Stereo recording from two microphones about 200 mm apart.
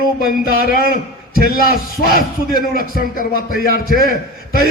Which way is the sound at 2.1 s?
45° left (ahead or behind).